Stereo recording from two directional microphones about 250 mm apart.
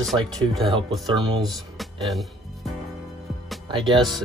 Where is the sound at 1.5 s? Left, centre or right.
Centre.